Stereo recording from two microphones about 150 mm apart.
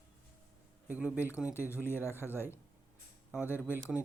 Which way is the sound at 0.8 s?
10° right (ahead or behind).